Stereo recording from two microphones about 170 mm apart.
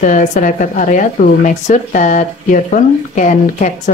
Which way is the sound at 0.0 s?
45° left (ahead or behind).